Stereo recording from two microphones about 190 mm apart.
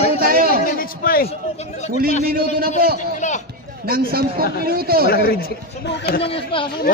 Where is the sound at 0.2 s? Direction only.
50° right (ahead or behind).